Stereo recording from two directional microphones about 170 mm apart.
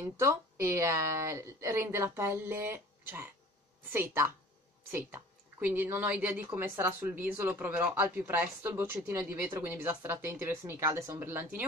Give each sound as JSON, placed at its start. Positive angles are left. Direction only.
{"t": 0.2, "sound": "a woman's voice", "side_deg": -15}